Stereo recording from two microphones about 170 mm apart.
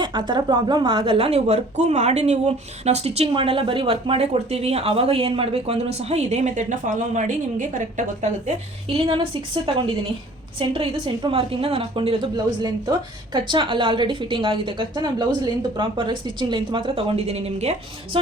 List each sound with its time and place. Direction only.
0.0 s a woman's voice: 25° right (ahead or behind)